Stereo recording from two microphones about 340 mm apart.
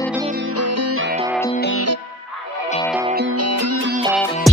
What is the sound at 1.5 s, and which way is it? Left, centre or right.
Music, left.